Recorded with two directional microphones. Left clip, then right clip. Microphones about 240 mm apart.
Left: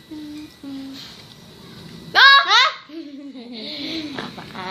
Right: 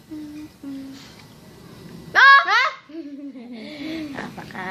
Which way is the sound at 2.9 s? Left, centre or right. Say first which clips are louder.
Even; centre.